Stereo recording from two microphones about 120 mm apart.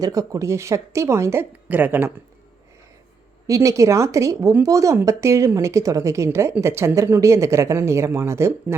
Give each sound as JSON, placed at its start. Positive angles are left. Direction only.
{"t": 0.0, "sound": "speech", "side_deg": -30}
{"t": 3.4, "sound": "speech", "side_deg": -30}